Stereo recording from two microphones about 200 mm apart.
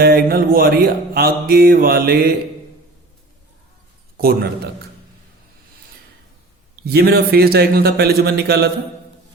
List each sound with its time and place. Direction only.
0.0 s mantra: 50° right (ahead or behind)
4.2 s mantra: 50° right (ahead or behind)
6.8 s mantra: 50° right (ahead or behind)